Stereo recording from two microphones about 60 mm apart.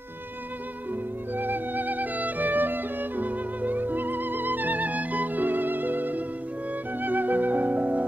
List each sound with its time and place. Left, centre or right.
1.3 s music: right